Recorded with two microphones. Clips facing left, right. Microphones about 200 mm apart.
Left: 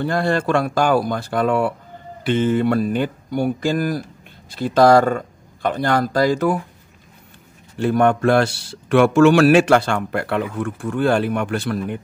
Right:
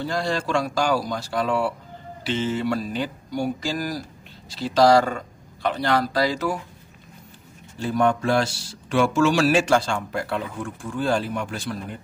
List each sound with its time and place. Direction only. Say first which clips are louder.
0.0 s speech: left 6 dB; 55° left (ahead or behind)
7.7 s speech: left 5 dB; 60° left (ahead or behind)